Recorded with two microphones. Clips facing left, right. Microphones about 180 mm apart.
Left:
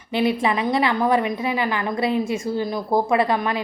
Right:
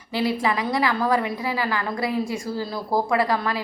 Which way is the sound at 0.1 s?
20° left (ahead or behind).